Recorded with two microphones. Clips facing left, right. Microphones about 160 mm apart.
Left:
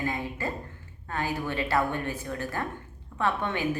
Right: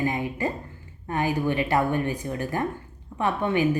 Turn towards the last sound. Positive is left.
turn(degrees=-15)  # may be behind; listen again after turning